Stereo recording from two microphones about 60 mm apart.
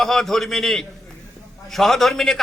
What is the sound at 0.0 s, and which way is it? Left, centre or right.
A man's voice, centre.